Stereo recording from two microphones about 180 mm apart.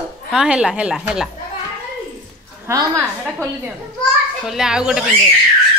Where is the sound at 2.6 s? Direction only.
20° right (ahead or behind).